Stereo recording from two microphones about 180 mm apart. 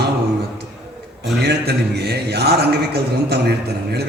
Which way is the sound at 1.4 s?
65° right (ahead or behind).